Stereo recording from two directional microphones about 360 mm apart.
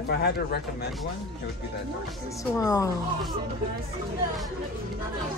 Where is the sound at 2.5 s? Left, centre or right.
Centre.